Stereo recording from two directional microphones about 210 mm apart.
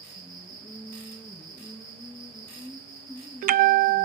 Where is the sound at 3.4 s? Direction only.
40° right (ahead or behind).